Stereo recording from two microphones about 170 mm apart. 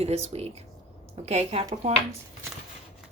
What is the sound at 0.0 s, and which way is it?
Speech, 40° right (ahead or behind).